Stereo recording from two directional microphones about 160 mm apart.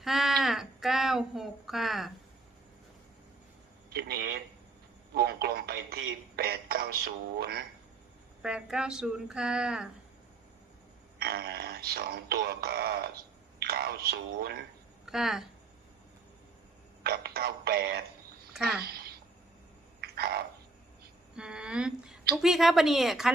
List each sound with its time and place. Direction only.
0.0 s speech: centre (ahead or behind)
3.8 s speech: 80° right
8.4 s speech: 5° right (ahead or behind)
11.2 s speech: 75° right (ahead or behind)
15.0 s speech: centre (ahead or behind)
17.0 s speech: 80° right
18.6 s speech: 75° right (ahead or behind)
20.0 s a sound: 80° right
21.3 s speech: 5° right (ahead or behind)